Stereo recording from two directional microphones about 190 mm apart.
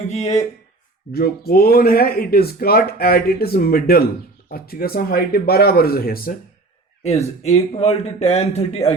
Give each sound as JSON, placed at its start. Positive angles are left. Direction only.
{"t": 0.1, "sound": "speech", "side_deg": 35}
{"t": 1.1, "sound": "speech", "side_deg": 55}
{"t": 7.0, "sound": "speech", "side_deg": 35}